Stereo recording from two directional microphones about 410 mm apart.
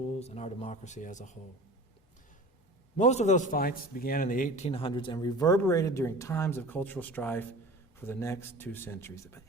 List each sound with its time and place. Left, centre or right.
0.2 s a man's voice: centre
3.0 s a man's voice: centre